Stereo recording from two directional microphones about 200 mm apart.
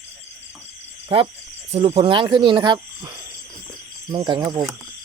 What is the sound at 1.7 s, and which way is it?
Cricket, 30° right (ahead or behind).